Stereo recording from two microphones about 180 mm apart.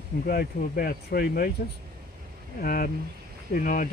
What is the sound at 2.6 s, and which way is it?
Speech, 50° left (ahead or behind).